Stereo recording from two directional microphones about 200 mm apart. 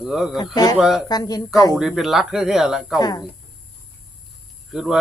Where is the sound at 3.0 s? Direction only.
20° left (ahead or behind).